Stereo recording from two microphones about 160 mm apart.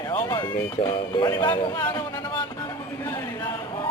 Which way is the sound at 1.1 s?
25° left (ahead or behind).